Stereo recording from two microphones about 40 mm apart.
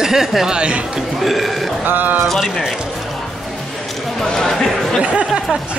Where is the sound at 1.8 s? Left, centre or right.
Right.